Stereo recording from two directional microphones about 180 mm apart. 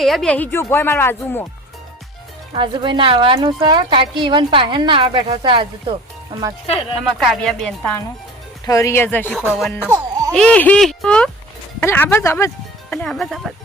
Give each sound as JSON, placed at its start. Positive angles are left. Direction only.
{"t": 0.0, "sound": "speech", "side_deg": 0}
{"t": 2.5, "sound": "speech", "side_deg": -25}
{"t": 7.0, "sound": "speech", "side_deg": 0}
{"t": 8.6, "sound": "speech", "side_deg": 15}
{"t": 9.9, "sound": "baby cry", "side_deg": -20}
{"t": 10.3, "sound": "speech", "side_deg": 5}
{"t": 12.9, "sound": "speech", "side_deg": 5}